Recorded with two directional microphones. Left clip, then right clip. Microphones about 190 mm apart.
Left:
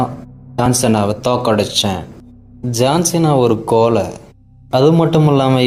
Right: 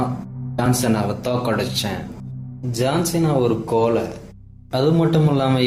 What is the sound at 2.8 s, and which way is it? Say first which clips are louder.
Speech: left 6 dB; 50° left (ahead or behind).